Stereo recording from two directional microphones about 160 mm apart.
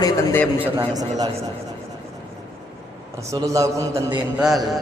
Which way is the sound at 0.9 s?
25° right (ahead or behind).